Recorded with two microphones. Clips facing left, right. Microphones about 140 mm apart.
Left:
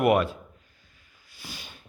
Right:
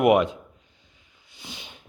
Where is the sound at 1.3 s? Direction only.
20° right (ahead or behind).